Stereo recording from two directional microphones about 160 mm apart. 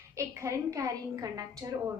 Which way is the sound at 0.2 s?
20° right (ahead or behind).